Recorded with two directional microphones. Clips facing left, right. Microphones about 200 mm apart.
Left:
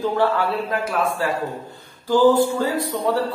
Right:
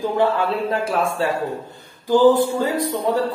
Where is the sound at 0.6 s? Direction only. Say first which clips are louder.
Right 2 dB; 30° right (ahead or behind).